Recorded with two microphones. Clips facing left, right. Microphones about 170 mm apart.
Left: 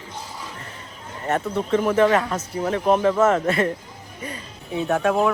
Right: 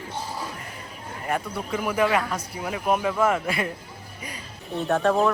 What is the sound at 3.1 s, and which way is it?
Speech, 30° left (ahead or behind).